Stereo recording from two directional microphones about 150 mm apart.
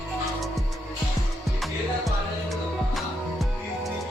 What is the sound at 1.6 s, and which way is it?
Music, centre (ahead or behind).